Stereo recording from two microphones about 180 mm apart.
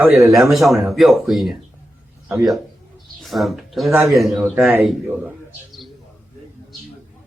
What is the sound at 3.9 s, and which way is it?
Speech, 15° right (ahead or behind).